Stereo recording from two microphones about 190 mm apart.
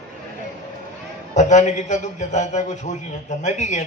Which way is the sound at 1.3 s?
40° left (ahead or behind).